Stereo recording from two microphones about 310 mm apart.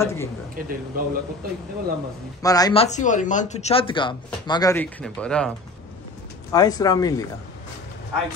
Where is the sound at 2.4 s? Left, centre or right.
Centre.